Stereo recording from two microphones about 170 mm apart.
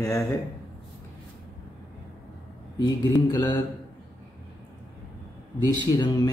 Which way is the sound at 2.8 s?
25° left (ahead or behind).